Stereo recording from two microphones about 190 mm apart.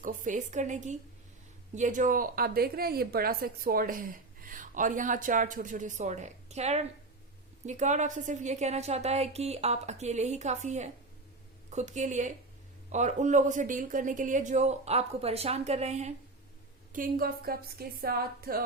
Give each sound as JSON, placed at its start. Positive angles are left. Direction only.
{"t": 0.0, "sound": "a woman's voice", "side_deg": -40}
{"t": 16.9, "sound": "a woman's voice", "side_deg": -50}